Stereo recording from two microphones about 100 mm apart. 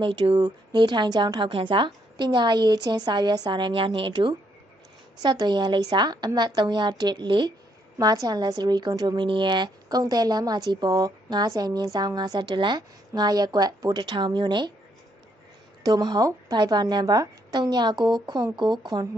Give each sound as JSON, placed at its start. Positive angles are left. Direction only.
{"t": 0.0, "sound": "a woman's voice", "side_deg": -55}
{"t": 15.8, "sound": "a woman's voice", "side_deg": -40}